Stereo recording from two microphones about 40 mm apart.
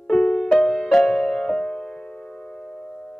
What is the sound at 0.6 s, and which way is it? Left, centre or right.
Music, centre.